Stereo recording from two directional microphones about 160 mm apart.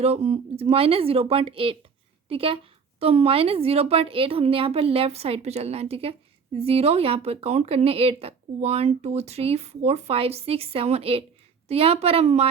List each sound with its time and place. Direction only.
0.0 s speech: 40° right (ahead or behind)